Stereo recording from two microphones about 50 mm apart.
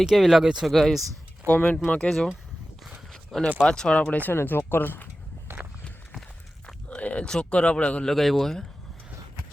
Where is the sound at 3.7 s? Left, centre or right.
Centre.